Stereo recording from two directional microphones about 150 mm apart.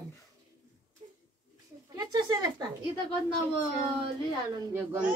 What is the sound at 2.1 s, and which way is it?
Speech, 25° right (ahead or behind).